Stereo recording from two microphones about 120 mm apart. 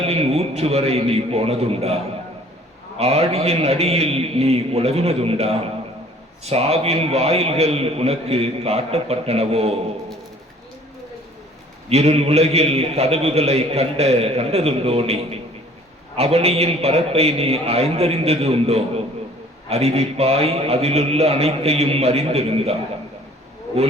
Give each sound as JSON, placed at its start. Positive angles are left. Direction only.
{"t": 0.0, "sound": "a man's voice", "side_deg": -60}
{"t": 3.0, "sound": "a man's voice", "side_deg": -60}
{"t": 11.9, "sound": "a man's voice", "side_deg": -60}